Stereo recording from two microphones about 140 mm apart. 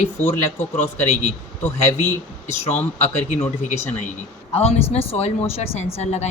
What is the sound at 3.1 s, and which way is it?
Speech, 50° left (ahead or behind).